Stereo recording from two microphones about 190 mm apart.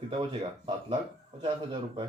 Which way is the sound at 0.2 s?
30° right (ahead or behind).